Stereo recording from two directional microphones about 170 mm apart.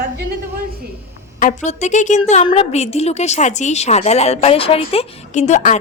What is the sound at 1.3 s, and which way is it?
A woman's voice, 45° left (ahead or behind).